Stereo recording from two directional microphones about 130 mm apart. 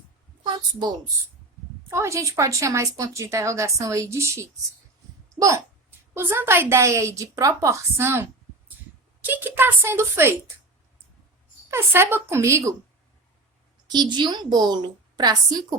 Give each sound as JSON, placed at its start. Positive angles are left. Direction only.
{"t": 1.9, "sound": "speech", "side_deg": -20}
{"t": 11.7, "sound": "speech", "side_deg": -20}
{"t": 13.8, "sound": "a woman's voice", "side_deg": -35}